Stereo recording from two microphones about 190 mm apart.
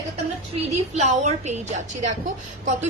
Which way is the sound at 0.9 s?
40° right (ahead or behind).